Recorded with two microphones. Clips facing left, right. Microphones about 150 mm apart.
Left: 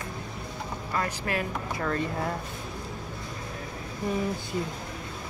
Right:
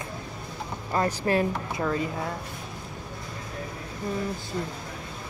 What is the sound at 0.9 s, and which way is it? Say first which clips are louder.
Speech: right 6 dB; 30° right (ahead or behind).